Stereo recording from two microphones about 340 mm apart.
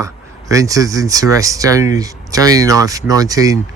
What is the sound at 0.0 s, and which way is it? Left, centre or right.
Speech, centre.